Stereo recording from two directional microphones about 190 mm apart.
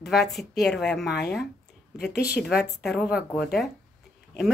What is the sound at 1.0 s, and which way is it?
Speech, 60° left (ahead or behind).